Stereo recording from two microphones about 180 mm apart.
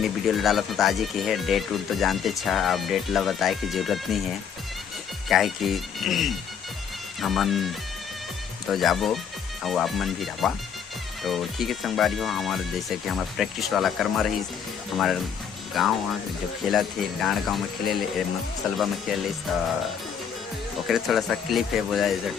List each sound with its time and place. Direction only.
0.0 s speech: centre (ahead or behind)
5.3 s speech: centre (ahead or behind)
20.8 s speech: centre (ahead or behind)